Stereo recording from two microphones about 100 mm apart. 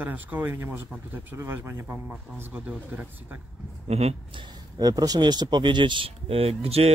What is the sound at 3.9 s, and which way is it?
Speech, 90° right.